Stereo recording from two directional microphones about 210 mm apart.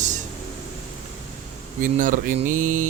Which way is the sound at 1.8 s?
40° right (ahead or behind).